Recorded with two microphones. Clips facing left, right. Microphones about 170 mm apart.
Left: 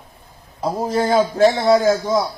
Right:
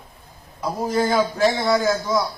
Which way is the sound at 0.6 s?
30° left (ahead or behind).